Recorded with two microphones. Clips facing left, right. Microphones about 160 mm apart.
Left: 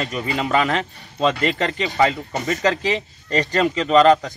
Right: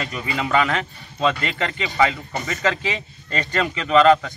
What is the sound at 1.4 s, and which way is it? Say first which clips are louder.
Speech: left 4 dB; 40° left (ahead or behind).